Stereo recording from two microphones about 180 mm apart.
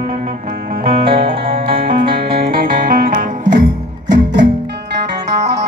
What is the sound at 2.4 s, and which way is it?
Music, 50° right (ahead or behind).